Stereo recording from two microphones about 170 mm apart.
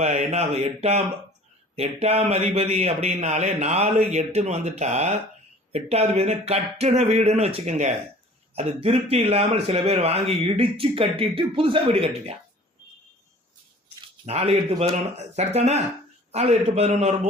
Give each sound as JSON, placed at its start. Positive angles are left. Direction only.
{"t": 0.0, "sound": "speech", "side_deg": -45}
{"t": 14.3, "sound": "speech", "side_deg": -35}